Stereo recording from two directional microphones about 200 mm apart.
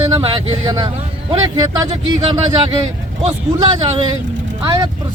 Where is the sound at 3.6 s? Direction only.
20° right (ahead or behind).